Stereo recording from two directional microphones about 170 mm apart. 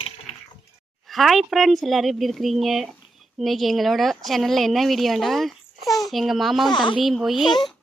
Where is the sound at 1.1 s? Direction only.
Centre (ahead or behind).